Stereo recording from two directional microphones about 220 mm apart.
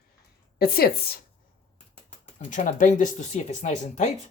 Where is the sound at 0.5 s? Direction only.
45° left (ahead or behind).